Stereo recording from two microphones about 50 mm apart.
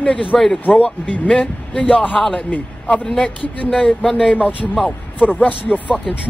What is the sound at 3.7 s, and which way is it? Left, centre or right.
Speech, left.